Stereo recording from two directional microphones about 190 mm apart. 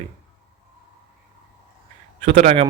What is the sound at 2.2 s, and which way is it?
Speech, 40° right (ahead or behind).